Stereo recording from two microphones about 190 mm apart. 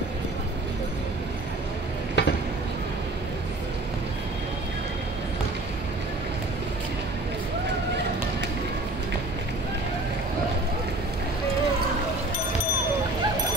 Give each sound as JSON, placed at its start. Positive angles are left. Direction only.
{"t": 2.2, "sound": "stir", "side_deg": 65}